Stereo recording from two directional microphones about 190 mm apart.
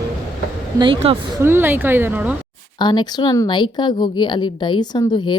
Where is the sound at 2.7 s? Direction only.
25° left (ahead or behind).